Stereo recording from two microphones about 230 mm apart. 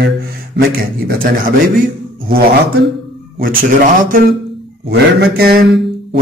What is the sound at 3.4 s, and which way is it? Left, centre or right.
A man's voice, right.